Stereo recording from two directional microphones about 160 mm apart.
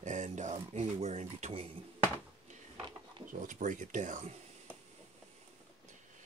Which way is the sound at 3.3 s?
55° right (ahead or behind).